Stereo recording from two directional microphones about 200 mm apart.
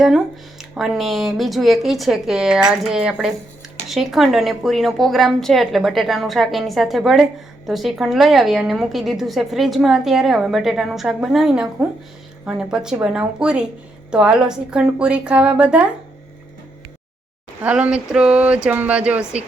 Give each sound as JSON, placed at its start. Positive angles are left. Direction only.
{"t": 0.6, "sound": "a woman's voice", "side_deg": 0}
{"t": 17.6, "sound": "speech", "side_deg": -5}